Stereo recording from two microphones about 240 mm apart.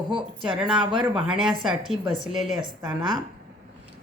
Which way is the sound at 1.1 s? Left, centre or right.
Centre.